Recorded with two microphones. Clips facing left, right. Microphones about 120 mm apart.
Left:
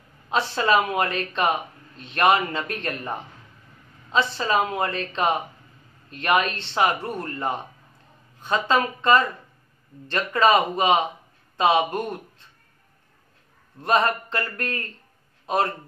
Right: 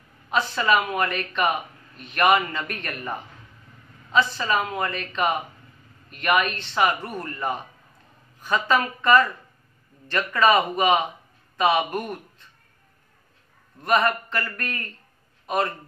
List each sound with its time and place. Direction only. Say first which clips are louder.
0.3 s speech: left 1 dB; 30° left (ahead or behind)
4.1 s speech: even; 25° left (ahead or behind)
13.8 s a man's voice: even; 25° left (ahead or behind)